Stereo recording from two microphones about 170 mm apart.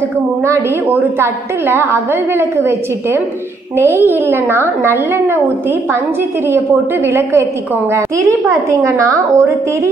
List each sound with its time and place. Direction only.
0.9 s a woman's voice: 15° right (ahead or behind)
7.1 s a woman's voice: 15° right (ahead or behind)